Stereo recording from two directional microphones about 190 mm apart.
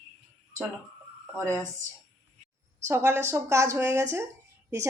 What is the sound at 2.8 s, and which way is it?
Speech, 15° right (ahead or behind).